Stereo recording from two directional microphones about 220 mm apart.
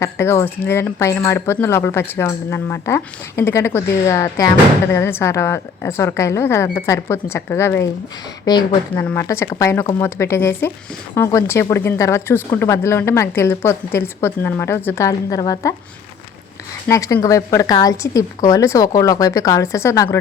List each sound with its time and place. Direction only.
0.0 s speech: 10° left (ahead or behind)
16.9 s speech: 15° left (ahead or behind)